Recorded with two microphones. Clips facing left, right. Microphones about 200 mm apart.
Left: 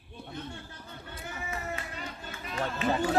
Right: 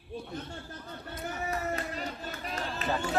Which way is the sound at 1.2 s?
40° right (ahead or behind).